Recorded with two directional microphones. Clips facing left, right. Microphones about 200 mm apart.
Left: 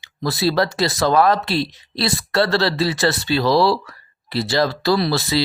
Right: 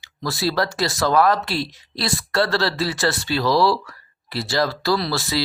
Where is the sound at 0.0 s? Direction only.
20° left (ahead or behind).